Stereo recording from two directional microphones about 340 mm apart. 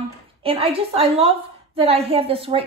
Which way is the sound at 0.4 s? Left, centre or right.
Centre.